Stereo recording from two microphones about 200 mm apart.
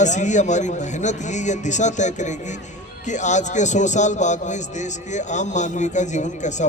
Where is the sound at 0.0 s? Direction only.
35° left (ahead or behind).